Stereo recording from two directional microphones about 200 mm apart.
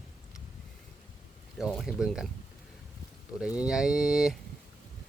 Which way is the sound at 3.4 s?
5° right (ahead or behind).